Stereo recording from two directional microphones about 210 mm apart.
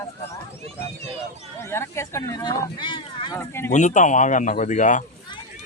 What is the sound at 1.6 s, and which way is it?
Speech, 10° left (ahead or behind).